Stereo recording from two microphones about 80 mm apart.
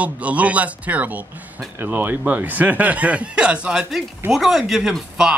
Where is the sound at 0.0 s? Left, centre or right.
Centre.